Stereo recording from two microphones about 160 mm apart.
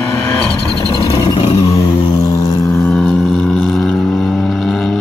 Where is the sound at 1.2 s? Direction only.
35° left (ahead or behind).